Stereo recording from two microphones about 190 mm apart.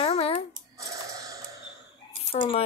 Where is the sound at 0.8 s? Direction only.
15° right (ahead or behind).